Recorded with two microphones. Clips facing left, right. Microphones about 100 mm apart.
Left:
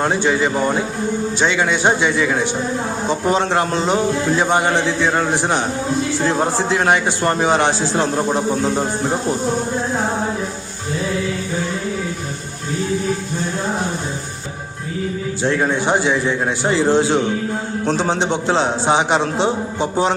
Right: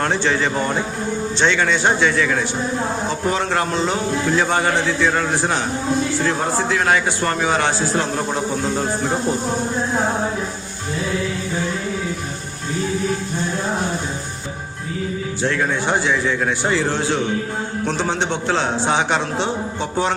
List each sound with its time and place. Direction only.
0.0 s a man's voice: 10° left (ahead or behind)
15.4 s a man's voice: 25° left (ahead or behind)